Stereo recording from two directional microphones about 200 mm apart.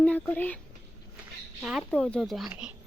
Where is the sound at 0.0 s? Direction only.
10° left (ahead or behind).